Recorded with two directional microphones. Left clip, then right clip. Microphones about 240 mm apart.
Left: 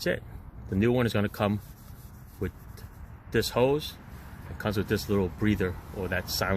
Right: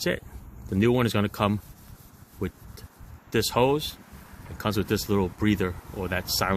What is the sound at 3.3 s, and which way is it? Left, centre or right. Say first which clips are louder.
Speech: right 2 dB; right.